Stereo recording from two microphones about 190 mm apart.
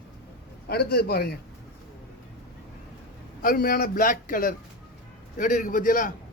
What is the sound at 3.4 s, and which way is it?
A man's voice, 50° left (ahead or behind).